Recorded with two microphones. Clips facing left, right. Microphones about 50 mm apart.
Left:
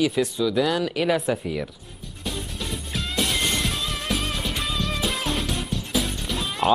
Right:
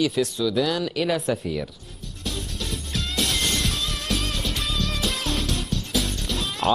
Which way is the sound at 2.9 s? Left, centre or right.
Centre.